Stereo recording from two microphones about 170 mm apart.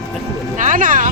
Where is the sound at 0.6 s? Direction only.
50° right (ahead or behind).